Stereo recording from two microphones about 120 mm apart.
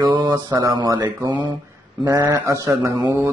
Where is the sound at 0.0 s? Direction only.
40° right (ahead or behind).